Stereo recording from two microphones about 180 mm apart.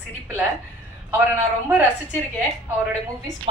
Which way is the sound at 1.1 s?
10° right (ahead or behind).